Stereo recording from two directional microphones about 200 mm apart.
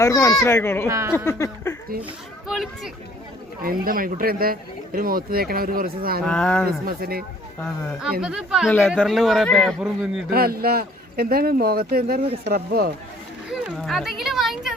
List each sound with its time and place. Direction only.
0.0 s a child's voice: 15° left (ahead or behind)
0.9 s speech: 15° right (ahead or behind)
1.1 s a child's voice: 15° left (ahead or behind)
2.5 s a man's voice: centre (ahead or behind)
3.6 s speech: 45° right (ahead or behind)
6.2 s a man's voice: 5° left (ahead or behind)
6.7 s speech: 50° right (ahead or behind)
8.2 s a man's voice: 5° right (ahead or behind)
10.2 s speech: 50° right (ahead or behind)
13.5 s a man's voice: centre (ahead or behind)